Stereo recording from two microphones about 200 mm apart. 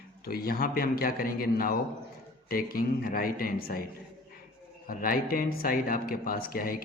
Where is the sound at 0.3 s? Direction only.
50° left (ahead or behind).